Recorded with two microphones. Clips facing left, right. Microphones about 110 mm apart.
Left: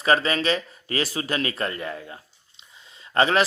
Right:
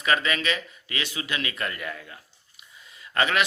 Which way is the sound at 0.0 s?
35° left (ahead or behind).